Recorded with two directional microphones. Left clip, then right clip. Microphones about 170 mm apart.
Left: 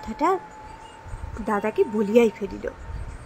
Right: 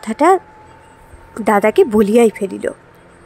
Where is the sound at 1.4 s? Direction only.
60° right (ahead or behind).